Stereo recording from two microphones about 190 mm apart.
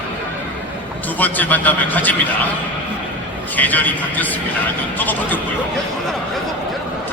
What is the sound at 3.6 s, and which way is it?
A man's voice, 10° left (ahead or behind).